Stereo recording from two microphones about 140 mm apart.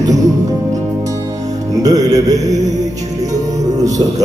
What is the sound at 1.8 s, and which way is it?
Music, 25° right (ahead or behind).